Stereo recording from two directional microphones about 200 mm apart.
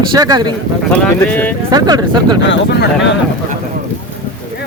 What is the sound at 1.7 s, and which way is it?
Speech, 20° right (ahead or behind).